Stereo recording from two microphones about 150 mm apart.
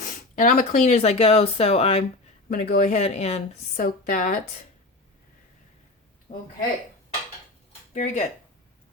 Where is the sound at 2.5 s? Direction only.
70° left (ahead or behind); by 3.4 s 45° left (ahead or behind).